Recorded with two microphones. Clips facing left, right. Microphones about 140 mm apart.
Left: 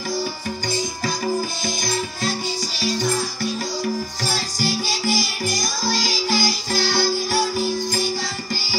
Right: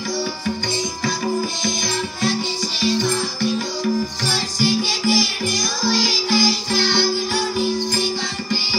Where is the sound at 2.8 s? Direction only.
40° left (ahead or behind).